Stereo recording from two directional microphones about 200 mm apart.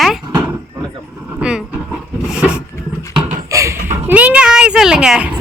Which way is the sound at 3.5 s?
15° right (ahead or behind).